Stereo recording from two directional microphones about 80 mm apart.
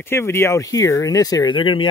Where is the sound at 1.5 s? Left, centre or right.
Left.